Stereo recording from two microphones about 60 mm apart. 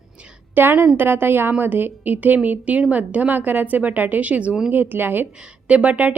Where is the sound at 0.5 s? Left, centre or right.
Right.